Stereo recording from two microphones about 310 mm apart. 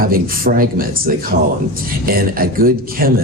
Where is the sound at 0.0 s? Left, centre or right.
Right.